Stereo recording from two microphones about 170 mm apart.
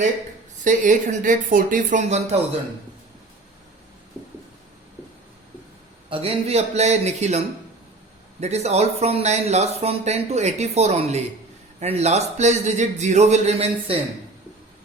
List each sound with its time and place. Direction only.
0.6 s speech: 50° right (ahead or behind)
6.1 s speech: 35° right (ahead or behind)